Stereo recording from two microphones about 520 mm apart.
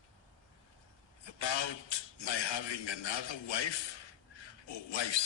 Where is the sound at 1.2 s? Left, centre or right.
Left.